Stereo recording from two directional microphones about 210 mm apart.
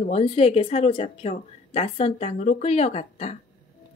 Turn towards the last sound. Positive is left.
turn(degrees=30)  # may be behind; listen again after turning